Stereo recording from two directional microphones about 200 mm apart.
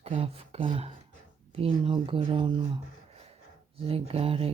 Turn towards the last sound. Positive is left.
turn(degrees=-30)  # may be behind; listen again after turning